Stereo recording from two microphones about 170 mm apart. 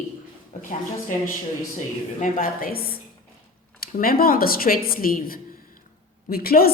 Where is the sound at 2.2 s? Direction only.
55° left (ahead or behind).